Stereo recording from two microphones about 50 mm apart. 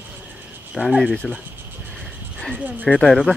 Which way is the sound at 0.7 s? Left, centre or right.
Centre.